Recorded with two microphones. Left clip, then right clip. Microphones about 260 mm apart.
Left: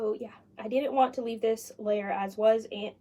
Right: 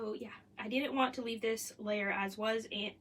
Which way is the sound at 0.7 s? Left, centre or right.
Right.